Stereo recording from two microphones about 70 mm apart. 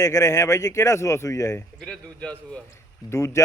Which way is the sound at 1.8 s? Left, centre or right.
Centre.